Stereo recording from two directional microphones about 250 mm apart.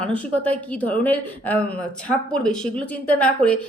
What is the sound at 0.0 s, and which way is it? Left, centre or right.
Speech, centre.